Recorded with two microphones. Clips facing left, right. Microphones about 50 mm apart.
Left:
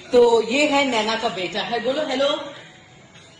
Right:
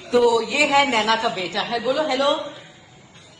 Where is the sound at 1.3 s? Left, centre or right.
Left.